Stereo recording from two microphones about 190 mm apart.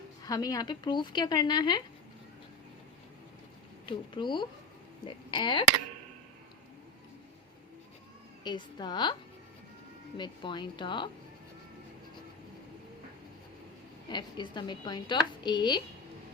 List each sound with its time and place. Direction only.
0.3 s a woman's voice: 20° left (ahead or behind)
3.8 s a woman's voice: 25° left (ahead or behind)
8.4 s a woman's voice: 25° left (ahead or behind)
10.2 s a woman's voice: 25° left (ahead or behind)
14.1 s a woman's voice: 25° left (ahead or behind)